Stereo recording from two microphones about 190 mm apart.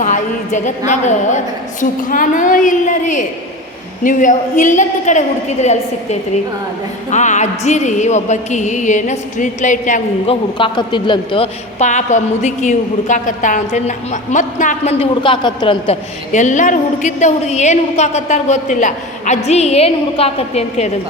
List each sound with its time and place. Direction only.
0.0 s a woman's voice: 40° left (ahead or behind)
10.6 s a woman's voice: 25° left (ahead or behind)
16.3 s a woman's voice: 40° left (ahead or behind)